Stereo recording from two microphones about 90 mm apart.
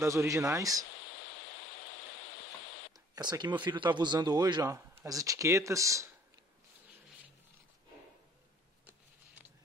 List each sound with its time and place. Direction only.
0.0 s speech: 35° right (ahead or behind)
2.9 s speech: 50° right (ahead or behind)
4.6 s speech: 35° right (ahead or behind)